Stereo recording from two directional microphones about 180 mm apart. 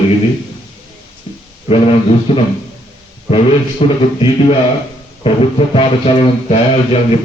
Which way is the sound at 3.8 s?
35° left (ahead or behind).